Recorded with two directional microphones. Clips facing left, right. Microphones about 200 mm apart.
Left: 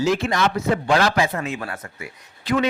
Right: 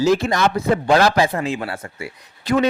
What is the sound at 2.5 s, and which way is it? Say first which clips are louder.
Speech: right 3 dB; 45° right (ahead or behind).